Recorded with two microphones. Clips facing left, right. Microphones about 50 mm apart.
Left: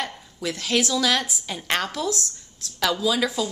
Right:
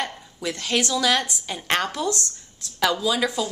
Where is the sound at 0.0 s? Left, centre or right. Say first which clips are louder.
Right 1 dB; centre.